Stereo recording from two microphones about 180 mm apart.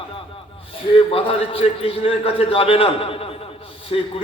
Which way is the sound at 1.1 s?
30° left (ahead or behind).